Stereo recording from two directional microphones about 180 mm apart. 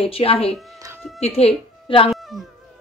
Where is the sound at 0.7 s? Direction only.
15° right (ahead or behind).